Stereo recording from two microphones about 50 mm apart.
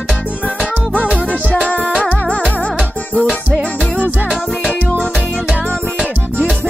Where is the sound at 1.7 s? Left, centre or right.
Left.